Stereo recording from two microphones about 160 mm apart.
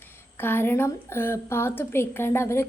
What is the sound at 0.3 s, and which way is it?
A woman's voice, 15° left (ahead or behind).